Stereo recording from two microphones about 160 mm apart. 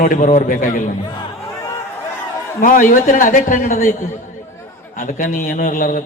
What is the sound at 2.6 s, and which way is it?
A man's voice, 55° left (ahead or behind).